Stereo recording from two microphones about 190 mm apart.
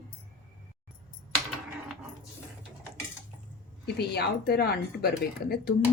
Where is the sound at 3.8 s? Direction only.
55° left (ahead or behind).